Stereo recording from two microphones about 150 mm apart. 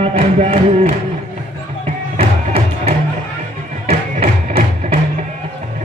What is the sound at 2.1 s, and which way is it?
Music, 40° right (ahead or behind).